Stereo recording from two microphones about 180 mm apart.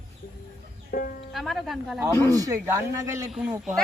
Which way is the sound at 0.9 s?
55° left (ahead or behind).